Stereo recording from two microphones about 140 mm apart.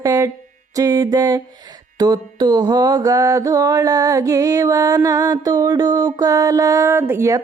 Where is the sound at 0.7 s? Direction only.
25° right (ahead or behind).